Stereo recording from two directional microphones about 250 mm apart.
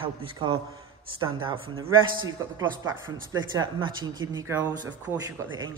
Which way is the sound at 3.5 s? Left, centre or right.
Centre.